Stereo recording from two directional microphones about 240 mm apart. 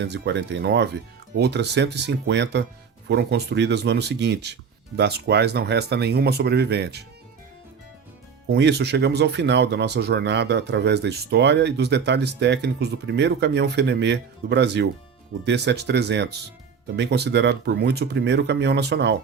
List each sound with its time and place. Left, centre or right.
0.0 s speech: right
8.4 s speech: right